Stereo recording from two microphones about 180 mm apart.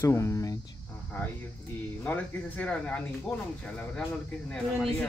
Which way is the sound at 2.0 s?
10° left (ahead or behind).